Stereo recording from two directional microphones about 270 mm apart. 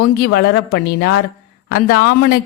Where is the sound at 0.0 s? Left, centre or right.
Left.